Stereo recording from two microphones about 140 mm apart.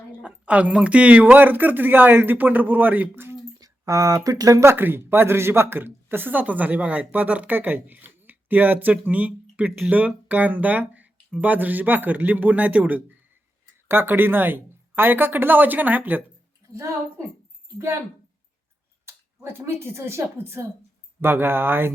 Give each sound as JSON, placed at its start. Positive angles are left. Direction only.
{"t": 0.2, "sound": "speech", "side_deg": -10}
{"t": 3.6, "sound": "a woman's voice", "side_deg": -25}
{"t": 19.0, "sound": "speech", "side_deg": -15}